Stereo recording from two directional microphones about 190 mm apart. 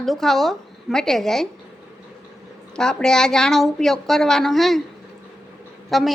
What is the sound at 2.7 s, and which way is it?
A woman's voice, 5° left (ahead or behind).